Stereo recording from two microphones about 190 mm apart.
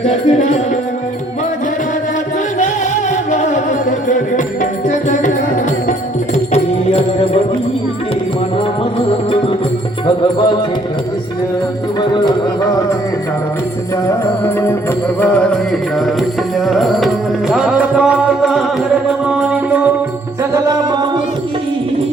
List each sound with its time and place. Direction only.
0.0 s music: 35° left (ahead or behind)
3.1 s music: 40° left (ahead or behind)
6.3 s music: 35° left (ahead or behind)
9.0 s music: 30° left (ahead or behind)
11.9 s music: 20° left (ahead or behind)
15.2 s music: 5° left (ahead or behind)
16.6 s music: centre (ahead or behind)